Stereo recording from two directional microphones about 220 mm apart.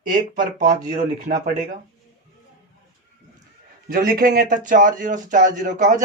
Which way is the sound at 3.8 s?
40° right (ahead or behind).